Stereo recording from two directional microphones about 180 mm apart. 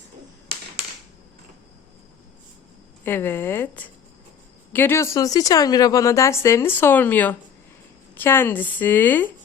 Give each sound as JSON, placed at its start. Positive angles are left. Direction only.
{"t": 3.0, "sound": "a woman's voice", "side_deg": 10}